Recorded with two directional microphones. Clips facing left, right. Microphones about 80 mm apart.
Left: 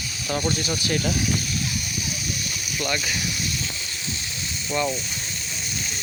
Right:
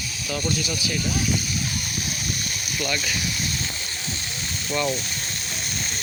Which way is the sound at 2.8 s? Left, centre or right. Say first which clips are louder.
Left 1 dB; centre.